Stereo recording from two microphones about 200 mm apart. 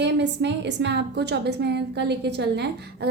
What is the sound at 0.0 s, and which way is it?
A woman's voice, 60° right (ahead or behind).